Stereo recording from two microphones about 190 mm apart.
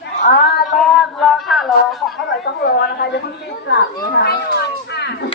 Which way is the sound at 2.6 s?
60° left (ahead or behind).